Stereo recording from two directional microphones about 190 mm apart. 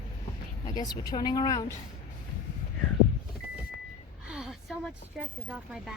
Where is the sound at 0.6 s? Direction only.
20° left (ahead or behind).